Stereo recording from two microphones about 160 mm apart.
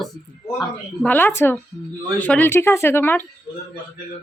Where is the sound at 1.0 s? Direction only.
10° left (ahead or behind).